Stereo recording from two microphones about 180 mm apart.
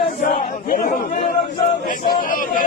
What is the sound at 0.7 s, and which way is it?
A man's voice, 50° left (ahead or behind).